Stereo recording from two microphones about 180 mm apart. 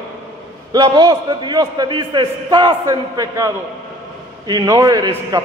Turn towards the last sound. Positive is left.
turn(degrees=-20)  # may be behind; listen again after turning